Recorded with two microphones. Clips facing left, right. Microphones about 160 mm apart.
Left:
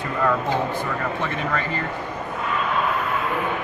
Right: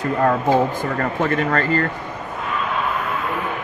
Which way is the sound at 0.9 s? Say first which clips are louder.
Right 6 dB; 55° right (ahead or behind).